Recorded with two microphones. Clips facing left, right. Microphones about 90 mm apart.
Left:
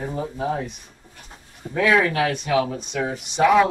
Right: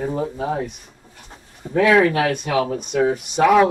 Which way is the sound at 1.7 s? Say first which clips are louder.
Right 4 dB; 50° right (ahead or behind).